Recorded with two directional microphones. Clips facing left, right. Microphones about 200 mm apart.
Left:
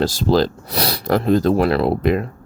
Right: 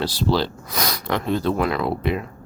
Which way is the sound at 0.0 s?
45° left (ahead or behind).